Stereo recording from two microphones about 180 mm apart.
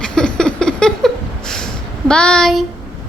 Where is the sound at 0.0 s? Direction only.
5° left (ahead or behind).